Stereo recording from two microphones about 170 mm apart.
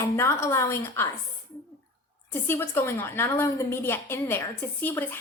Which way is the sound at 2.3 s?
15° left (ahead or behind).